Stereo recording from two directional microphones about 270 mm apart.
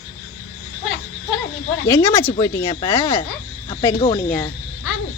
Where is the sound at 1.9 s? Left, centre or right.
Centre.